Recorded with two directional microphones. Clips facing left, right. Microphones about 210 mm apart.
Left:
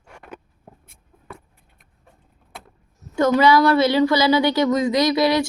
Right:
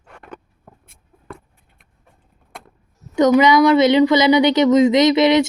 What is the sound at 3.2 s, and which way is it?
A woman's voice, 20° right (ahead or behind).